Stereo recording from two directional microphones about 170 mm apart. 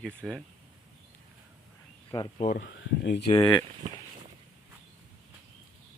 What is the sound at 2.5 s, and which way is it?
Speech, 90° left.